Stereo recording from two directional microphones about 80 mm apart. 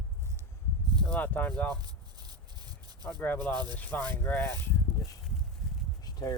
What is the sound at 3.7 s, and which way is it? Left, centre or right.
Speech, centre.